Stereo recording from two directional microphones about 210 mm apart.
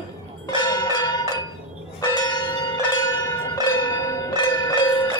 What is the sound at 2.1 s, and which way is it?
Church bell, 20° left (ahead or behind).